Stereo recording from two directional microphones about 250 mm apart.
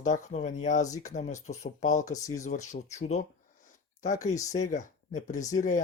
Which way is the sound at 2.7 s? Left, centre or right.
Left.